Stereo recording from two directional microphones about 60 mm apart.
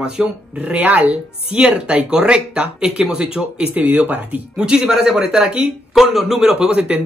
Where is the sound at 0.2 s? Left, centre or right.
Centre.